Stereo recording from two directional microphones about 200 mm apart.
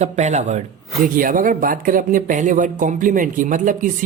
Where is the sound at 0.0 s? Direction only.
35° right (ahead or behind).